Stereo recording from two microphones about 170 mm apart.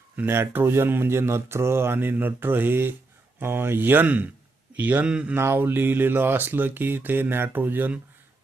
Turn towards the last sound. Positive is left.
turn(degrees=-10)  # may be behind; listen again after turning